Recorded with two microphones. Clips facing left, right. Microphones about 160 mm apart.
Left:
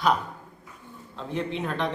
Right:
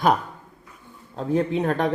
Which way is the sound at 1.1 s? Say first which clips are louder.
Right 8 dB; 40° right (ahead or behind).